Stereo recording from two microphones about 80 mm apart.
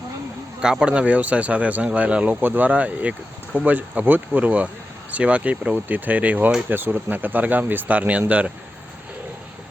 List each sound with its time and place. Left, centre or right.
0.6 s speech: centre